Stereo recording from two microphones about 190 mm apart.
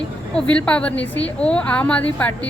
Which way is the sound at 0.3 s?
5° left (ahead or behind).